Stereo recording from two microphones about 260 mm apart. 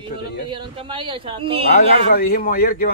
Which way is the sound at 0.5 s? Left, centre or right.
Centre.